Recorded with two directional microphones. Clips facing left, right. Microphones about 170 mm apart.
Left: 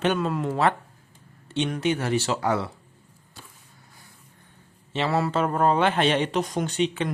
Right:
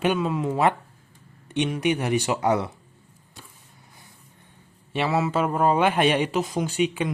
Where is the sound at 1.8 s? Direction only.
15° right (ahead or behind).